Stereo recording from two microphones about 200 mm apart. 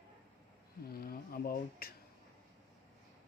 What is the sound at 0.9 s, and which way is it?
Speech, 50° left (ahead or behind).